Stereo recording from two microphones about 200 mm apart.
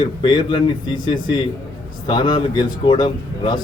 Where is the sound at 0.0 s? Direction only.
25° left (ahead or behind).